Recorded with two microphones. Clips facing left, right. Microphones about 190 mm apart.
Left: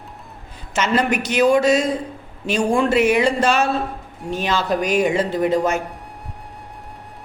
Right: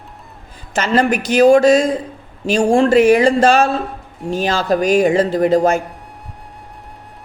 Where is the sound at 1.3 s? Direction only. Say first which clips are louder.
Right 6 dB; 45° right (ahead or behind).